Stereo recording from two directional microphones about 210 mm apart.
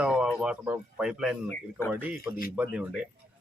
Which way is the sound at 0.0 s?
5° right (ahead or behind).